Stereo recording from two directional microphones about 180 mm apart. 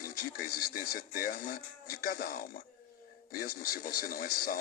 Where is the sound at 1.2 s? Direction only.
55° left (ahead or behind).